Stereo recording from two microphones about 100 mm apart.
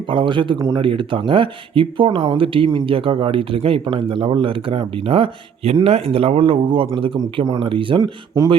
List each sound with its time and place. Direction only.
0.1 s speech: 55° right (ahead or behind)